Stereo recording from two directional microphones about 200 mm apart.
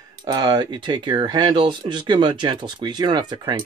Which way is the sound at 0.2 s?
20° right (ahead or behind).